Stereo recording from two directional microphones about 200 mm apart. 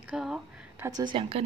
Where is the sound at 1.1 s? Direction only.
30° right (ahead or behind).